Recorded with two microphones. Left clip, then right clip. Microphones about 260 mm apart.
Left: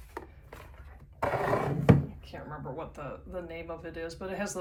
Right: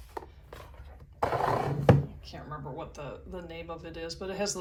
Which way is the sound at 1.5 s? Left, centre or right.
Centre.